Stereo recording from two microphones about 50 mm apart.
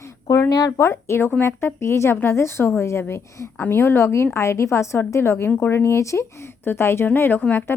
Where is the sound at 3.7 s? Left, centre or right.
Left.